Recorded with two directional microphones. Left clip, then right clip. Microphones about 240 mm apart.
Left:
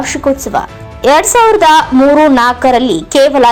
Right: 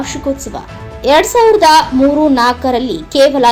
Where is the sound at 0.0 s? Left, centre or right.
Centre.